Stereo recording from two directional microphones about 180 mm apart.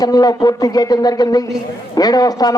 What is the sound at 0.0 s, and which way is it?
A man's voice, 20° left (ahead or behind).